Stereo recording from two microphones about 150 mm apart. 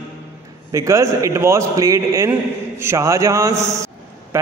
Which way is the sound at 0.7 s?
20° right (ahead or behind).